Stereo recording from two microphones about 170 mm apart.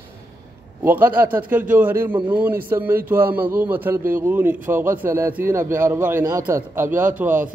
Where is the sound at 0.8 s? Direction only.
10° right (ahead or behind).